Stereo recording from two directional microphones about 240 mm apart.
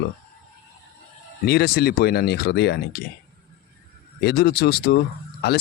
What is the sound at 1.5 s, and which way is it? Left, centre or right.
Speech, left.